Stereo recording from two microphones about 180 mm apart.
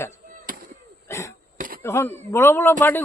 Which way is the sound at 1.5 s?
50° right (ahead or behind).